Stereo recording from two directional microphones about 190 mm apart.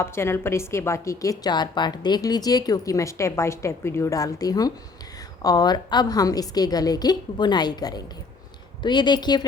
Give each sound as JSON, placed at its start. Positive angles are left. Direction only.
{"t": 0.0, "sound": "a woman's voice", "side_deg": 15}